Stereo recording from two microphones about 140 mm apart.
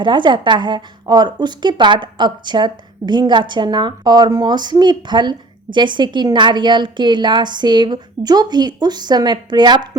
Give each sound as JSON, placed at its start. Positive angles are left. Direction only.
{"t": 0.0, "sound": "speech", "side_deg": -35}